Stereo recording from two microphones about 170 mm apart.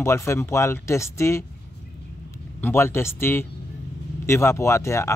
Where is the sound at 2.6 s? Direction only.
15° left (ahead or behind).